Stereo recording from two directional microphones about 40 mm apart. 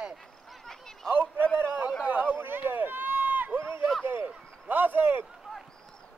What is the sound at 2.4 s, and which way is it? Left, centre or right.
Run, right.